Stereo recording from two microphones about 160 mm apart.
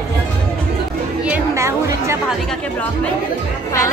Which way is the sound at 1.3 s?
20° right (ahead or behind).